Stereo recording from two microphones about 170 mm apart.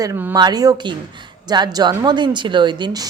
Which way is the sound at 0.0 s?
15° right (ahead or behind).